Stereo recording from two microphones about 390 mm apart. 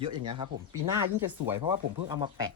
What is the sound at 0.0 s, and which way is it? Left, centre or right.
Speech, centre.